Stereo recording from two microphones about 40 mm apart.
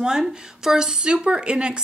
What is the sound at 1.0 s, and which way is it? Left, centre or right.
Speech, right.